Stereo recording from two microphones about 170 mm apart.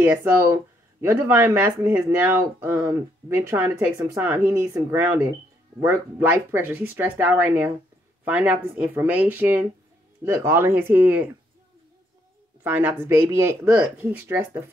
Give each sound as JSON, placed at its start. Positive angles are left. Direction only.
{"t": 0.0, "sound": "speech", "side_deg": -15}
{"t": 12.6, "sound": "speech", "side_deg": -10}